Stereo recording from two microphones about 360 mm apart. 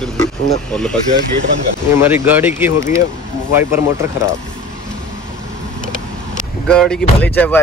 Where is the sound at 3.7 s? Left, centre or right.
Centre.